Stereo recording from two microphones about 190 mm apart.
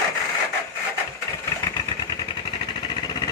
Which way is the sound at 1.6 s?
20° left (ahead or behind).